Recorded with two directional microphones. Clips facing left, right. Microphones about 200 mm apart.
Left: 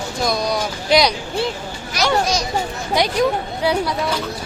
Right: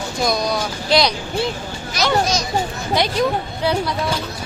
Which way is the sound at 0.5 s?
15° left (ahead or behind).